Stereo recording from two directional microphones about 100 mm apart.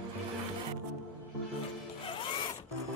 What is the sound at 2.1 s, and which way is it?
Zipper, 55° left (ahead or behind).